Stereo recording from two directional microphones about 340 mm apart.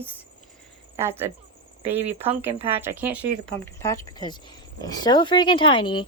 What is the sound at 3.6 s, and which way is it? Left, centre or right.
Speech, centre.